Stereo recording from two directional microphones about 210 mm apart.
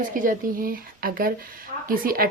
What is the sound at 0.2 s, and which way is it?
Speech, 40° right (ahead or behind).